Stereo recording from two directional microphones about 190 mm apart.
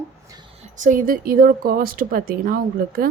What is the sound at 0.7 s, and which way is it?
Speech, 45° right (ahead or behind).